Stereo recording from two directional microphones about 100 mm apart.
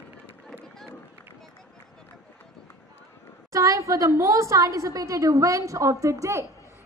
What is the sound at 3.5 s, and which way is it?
A woman's voice, 35° right (ahead or behind).